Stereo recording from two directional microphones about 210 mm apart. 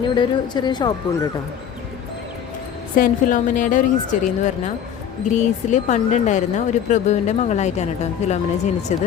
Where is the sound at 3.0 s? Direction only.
40° left (ahead or behind).